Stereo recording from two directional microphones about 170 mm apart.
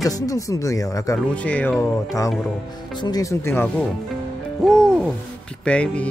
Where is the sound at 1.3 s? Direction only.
5° left (ahead or behind).